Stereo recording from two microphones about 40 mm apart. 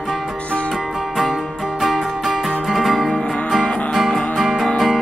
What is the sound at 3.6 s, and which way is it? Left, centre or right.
Music, left.